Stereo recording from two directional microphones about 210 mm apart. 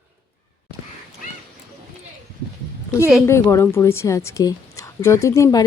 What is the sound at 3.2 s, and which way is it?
A woman's voice, 15° left (ahead or behind).